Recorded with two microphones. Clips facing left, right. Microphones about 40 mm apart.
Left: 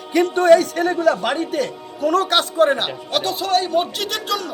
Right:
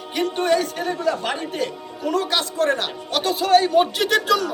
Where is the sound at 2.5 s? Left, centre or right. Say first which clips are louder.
Left 4 dB; centre.